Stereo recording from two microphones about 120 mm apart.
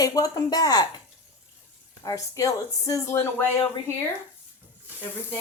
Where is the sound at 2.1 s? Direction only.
30° left (ahead or behind).